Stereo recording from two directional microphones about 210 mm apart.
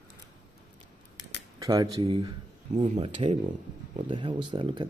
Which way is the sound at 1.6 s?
20° right (ahead or behind).